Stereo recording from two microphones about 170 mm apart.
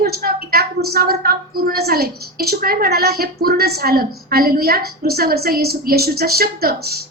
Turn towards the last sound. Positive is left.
turn(degrees=-65)  # may be behind; listen again after turning